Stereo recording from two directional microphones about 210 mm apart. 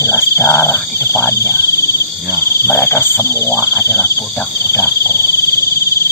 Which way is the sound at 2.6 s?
10° left (ahead or behind).